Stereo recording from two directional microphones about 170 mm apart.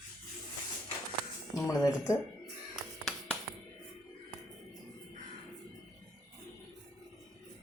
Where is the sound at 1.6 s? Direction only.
20° left (ahead or behind).